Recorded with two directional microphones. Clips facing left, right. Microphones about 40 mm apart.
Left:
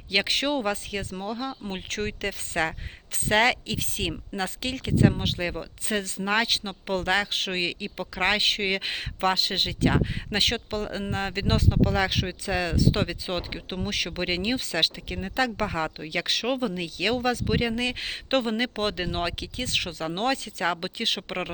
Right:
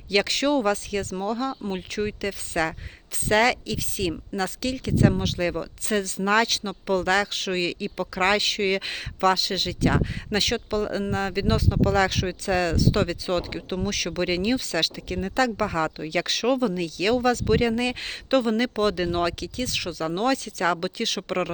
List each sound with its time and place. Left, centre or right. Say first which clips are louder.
0.1 s speech: right 3 dB; left
1.9 s speech: right 1 dB; left
2.5 s speech: right 1 dB; left; by 6.0 s centre
6.0 s speech: right 4 dB; left
6.2 s speech: right 3 dB; centre; by 11.8 s left
11.8 s speech: right 5 dB; centre
16.0 s speech: right 2 dB; centre
18.3 s speech: right 4 dB; left
19.6 s speech: even; left